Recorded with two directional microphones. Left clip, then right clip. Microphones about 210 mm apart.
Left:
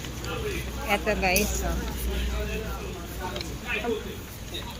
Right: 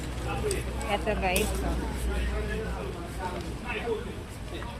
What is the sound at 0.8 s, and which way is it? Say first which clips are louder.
Speech: left 4 dB; 15° left (ahead or behind).